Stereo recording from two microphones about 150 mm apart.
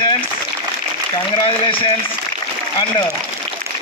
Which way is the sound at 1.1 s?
35° left (ahead or behind).